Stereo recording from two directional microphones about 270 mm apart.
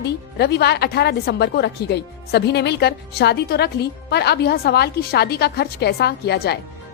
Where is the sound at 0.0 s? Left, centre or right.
Left.